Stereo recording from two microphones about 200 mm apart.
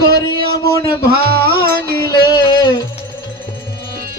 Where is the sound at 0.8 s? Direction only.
50° right (ahead or behind).